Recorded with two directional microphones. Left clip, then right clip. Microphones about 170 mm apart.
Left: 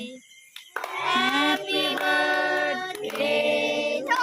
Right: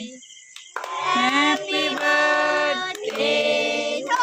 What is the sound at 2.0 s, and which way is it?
Music, 55° right (ahead or behind).